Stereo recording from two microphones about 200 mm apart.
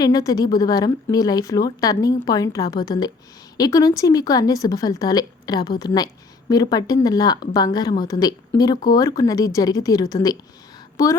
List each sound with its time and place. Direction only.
0.0 s speech: 20° left (ahead or behind)